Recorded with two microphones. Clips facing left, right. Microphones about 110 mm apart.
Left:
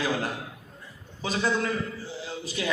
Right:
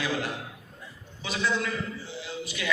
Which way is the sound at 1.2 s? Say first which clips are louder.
Left 2 dB; 40° left (ahead or behind).